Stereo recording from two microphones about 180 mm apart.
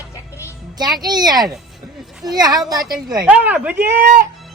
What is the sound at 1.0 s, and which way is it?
Speech, 20° right (ahead or behind).